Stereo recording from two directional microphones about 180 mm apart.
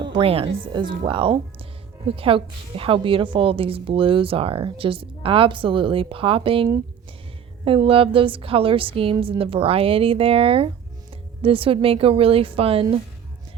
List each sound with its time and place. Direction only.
0.0 s a woman's voice: 30° right (ahead or behind)